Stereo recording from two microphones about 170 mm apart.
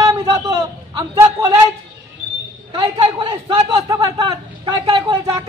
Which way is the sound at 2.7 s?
30° right (ahead or behind).